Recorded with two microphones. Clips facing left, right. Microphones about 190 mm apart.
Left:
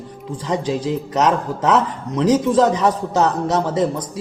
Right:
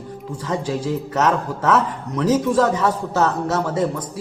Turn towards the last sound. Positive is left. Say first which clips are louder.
# left 2 dB
turn(degrees=20)  # may be behind; listen again after turning